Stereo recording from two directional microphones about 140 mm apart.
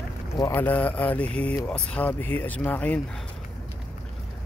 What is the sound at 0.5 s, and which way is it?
Speech, 10° left (ahead or behind).